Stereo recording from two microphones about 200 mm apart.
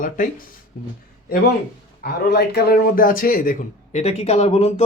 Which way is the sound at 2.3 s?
55° left (ahead or behind).